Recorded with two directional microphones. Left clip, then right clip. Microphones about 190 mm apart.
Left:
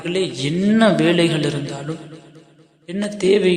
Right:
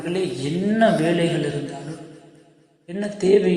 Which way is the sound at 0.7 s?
30° left (ahead or behind).